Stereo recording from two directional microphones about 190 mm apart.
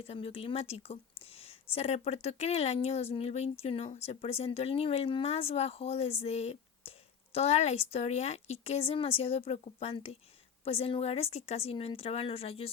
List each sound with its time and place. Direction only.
0.0 s speech: 30° left (ahead or behind)